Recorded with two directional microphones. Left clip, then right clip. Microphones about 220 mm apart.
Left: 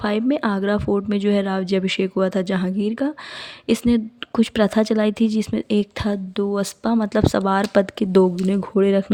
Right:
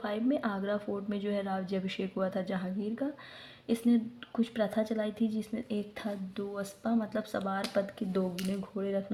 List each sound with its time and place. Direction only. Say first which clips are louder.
0.0 s speech: left 11 dB; 40° left (ahead or behind)